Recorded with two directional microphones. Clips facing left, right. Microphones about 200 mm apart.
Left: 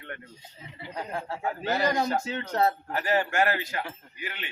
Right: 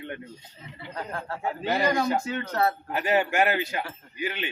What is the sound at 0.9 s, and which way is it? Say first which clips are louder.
Speech: even; 15° left (ahead or behind).